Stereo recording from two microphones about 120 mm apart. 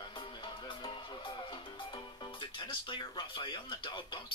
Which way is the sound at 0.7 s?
45° left (ahead or behind).